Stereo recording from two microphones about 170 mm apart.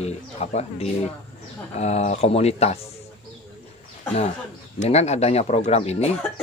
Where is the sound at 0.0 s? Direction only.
40° left (ahead or behind).